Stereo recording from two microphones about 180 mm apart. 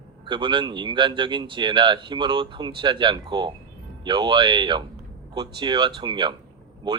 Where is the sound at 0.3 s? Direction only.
25° right (ahead or behind).